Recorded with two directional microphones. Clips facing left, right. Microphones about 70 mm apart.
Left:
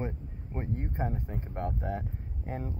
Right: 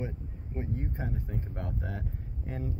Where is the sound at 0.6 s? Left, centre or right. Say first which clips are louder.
Left 2 dB; left.